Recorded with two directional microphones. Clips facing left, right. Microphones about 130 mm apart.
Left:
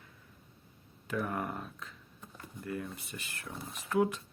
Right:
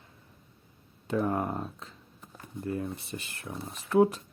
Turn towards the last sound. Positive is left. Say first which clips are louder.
# right 6 dB
turn(degrees=-35)  # may be behind; listen again after turning